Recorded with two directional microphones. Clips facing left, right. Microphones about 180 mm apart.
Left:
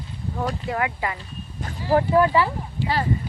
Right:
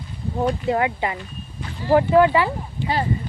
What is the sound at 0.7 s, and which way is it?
Speech, 25° right (ahead or behind).